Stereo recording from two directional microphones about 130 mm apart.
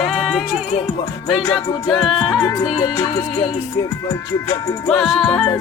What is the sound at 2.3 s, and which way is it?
Music, 35° left (ahead or behind).